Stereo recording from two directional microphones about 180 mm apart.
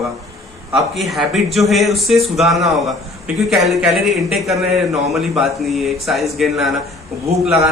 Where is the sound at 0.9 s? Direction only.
Centre (ahead or behind).